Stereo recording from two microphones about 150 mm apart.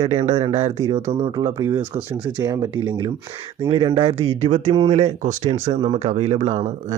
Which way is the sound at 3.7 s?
35° right (ahead or behind).